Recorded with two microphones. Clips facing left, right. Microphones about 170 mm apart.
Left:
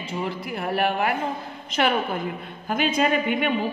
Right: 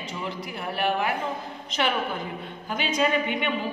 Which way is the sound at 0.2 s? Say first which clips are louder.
Left 5 dB; 50° left (ahead or behind).